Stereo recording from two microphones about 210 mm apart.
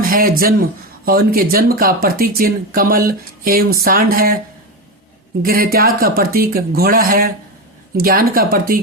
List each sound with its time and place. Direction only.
0.0 s speech: 45° right (ahead or behind)
5.4 s speech: 45° right (ahead or behind)